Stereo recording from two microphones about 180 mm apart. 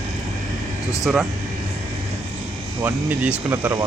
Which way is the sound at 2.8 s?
10° right (ahead or behind).